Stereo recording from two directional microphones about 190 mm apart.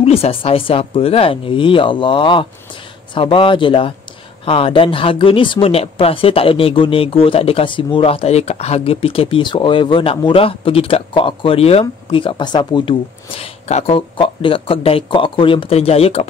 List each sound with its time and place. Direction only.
0.0 s speech: 30° left (ahead or behind)